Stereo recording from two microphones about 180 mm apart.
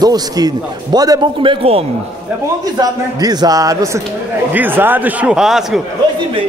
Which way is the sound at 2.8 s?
20° right (ahead or behind).